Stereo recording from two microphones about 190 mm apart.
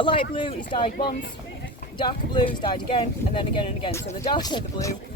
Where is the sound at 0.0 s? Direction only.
25° left (ahead or behind).